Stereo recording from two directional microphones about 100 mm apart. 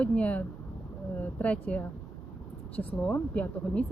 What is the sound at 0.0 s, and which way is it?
Speech, 10° left (ahead or behind).